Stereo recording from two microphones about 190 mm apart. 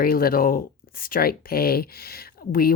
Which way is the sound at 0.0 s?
50° left (ahead or behind).